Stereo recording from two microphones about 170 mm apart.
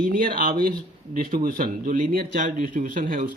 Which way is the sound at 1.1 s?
55° right (ahead or behind).